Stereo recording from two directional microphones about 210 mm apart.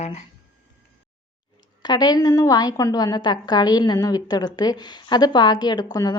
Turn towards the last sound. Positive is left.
turn(degrees=20)  # may be behind; listen again after turning